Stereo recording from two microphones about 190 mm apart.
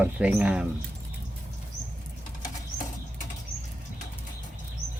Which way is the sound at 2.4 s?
40° left (ahead or behind).